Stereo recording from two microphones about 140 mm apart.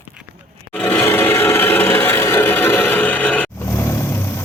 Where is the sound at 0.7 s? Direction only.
10° left (ahead or behind).